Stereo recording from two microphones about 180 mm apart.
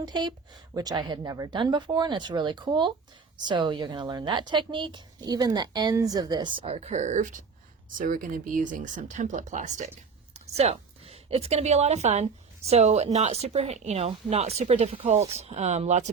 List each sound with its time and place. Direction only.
0.0 s a woman's voice: 25° right (ahead or behind); by 16.0 s 40° right (ahead or behind)